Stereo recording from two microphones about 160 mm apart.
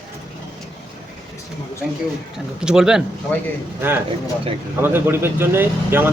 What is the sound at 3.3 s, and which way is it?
Speech, 10° left (ahead or behind).